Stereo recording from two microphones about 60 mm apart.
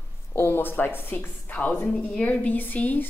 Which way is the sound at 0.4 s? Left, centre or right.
Left.